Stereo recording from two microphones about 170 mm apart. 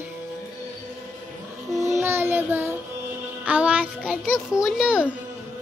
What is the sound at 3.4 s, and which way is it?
Music, 10° right (ahead or behind).